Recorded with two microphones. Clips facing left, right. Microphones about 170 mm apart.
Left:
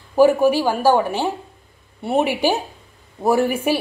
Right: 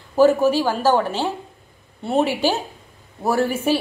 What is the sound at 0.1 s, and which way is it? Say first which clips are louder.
Speech: left 1 dB; 15° left (ahead or behind).